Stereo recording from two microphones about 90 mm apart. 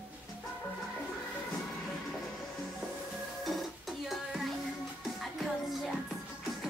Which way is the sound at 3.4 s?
Centre (ahead or behind).